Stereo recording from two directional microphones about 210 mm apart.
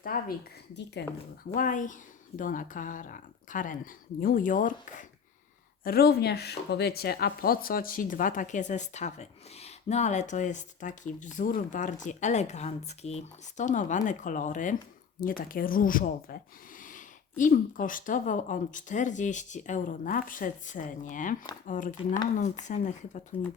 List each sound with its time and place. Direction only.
0.0 s a woman's voice: 45° left (ahead or behind)
1.5 s speech: 40° left (ahead or behind)